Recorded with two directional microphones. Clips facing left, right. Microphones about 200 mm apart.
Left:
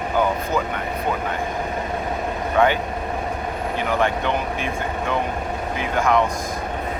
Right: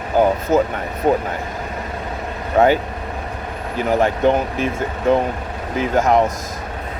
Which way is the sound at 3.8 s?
40° right (ahead or behind).